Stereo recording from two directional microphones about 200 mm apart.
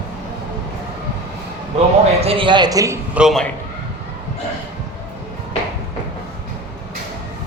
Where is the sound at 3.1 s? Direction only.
Centre (ahead or behind).